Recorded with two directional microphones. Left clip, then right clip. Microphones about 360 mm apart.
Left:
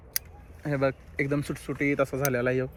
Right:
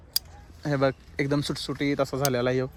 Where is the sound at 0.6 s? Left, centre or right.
Centre.